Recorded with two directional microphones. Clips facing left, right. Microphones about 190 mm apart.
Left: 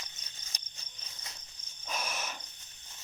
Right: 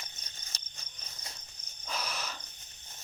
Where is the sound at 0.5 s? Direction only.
15° left (ahead or behind).